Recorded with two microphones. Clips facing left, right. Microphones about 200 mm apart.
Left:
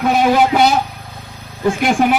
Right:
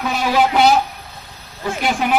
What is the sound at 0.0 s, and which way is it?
Speech, 50° left (ahead or behind).